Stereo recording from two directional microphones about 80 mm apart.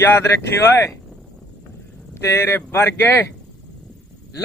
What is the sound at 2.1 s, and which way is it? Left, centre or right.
Speech, left.